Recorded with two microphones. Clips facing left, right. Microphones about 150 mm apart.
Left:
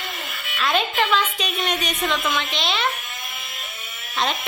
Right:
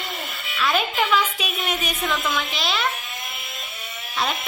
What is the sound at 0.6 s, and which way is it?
A woman's voice, centre (ahead or behind).